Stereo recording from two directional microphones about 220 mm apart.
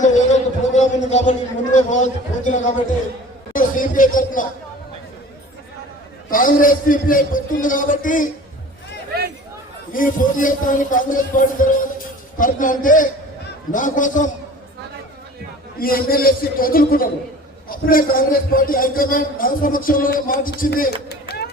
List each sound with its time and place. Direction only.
0.7 s a man's voice: 30° left (ahead or behind)
6.3 s a man's voice: 40° left (ahead or behind)
9.9 s a man's voice: 35° left (ahead or behind)
15.8 s a man's voice: 40° left (ahead or behind)